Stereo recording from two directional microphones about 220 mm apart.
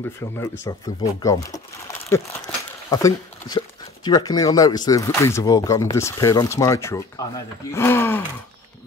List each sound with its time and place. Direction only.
0.2 s speech: 10° left (ahead or behind)